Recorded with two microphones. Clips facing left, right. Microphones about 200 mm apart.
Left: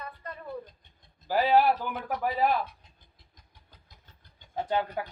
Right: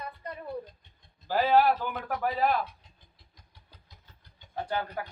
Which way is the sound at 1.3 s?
15° left (ahead or behind).